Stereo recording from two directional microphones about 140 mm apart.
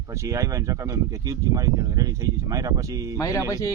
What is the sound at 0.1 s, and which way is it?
Speech, 20° right (ahead or behind).